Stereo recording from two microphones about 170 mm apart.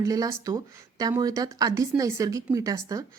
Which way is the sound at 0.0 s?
20° right (ahead or behind).